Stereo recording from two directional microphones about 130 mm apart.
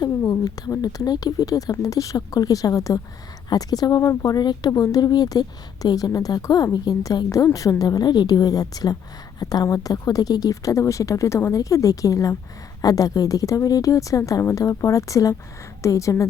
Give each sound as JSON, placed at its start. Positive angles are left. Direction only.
{"t": 0.2, "sound": "speech", "side_deg": 30}